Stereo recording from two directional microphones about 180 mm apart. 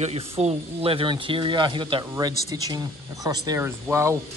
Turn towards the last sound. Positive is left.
turn(degrees=-15)  # may be behind; listen again after turning